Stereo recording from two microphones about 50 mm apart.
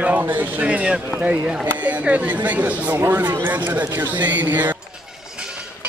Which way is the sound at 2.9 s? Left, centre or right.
Right.